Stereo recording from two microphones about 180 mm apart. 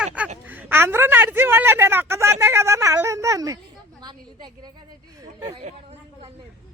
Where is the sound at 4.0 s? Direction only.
25° right (ahead or behind).